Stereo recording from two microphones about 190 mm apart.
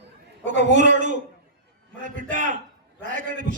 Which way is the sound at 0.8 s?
40° right (ahead or behind).